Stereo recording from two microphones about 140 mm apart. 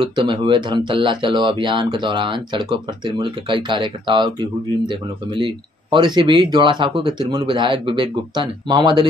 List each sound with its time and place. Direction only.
0.0 s speech: 35° right (ahead or behind)